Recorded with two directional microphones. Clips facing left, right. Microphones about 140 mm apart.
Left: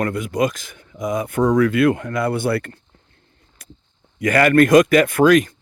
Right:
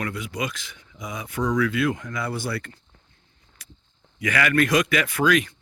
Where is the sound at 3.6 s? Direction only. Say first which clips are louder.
Left 6 dB; 45° left (ahead or behind).